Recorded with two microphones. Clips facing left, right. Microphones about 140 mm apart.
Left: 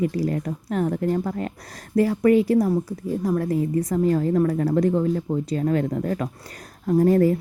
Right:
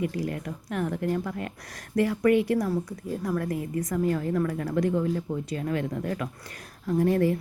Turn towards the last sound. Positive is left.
turn(degrees=40)  # may be behind; listen again after turning